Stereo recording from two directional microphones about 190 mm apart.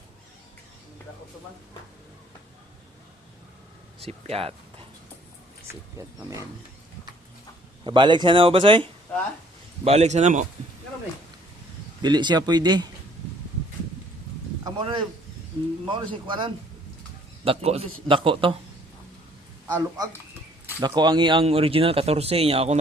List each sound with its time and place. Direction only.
4.0 s a man's voice: 30° right (ahead or behind)
6.0 s speech: 15° right (ahead or behind)
7.9 s a man's voice: 25° right (ahead or behind)
12.0 s speech: 25° right (ahead or behind)
14.6 s a sound: 20° right (ahead or behind)
15.6 s speech: 25° right (ahead or behind)
20.8 s speech: 20° right (ahead or behind)